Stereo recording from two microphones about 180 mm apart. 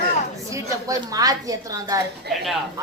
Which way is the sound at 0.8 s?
20° right (ahead or behind).